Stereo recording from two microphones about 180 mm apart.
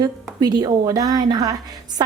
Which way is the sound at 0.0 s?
20° right (ahead or behind).